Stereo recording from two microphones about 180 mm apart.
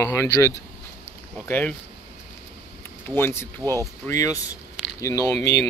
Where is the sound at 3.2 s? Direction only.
15° left (ahead or behind).